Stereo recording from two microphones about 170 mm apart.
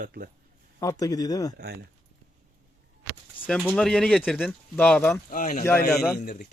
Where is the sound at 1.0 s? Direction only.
20° left (ahead or behind).